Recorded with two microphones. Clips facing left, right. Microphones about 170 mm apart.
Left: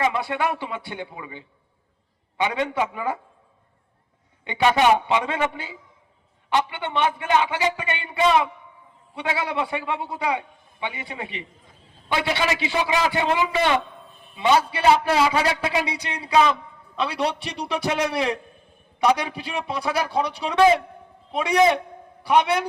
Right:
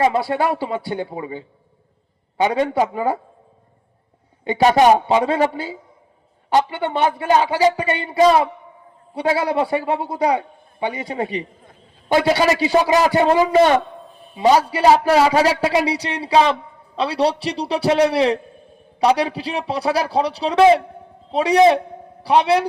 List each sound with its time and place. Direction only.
0.0 s a man's voice: 35° right (ahead or behind)
4.4 s a man's voice: 40° right (ahead or behind)